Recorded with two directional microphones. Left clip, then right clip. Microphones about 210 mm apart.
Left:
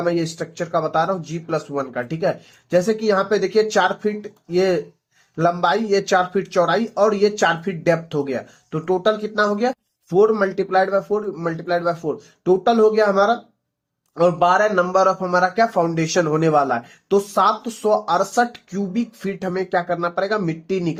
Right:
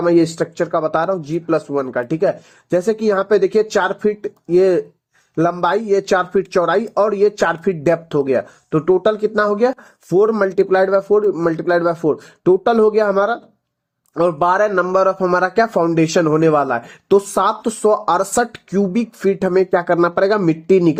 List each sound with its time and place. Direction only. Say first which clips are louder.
0.0 s speech: right 7 dB; 45° right (ahead or behind)